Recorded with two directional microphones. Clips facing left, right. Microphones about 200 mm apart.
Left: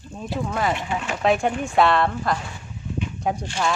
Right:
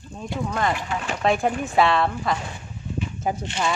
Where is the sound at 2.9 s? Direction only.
5° right (ahead or behind).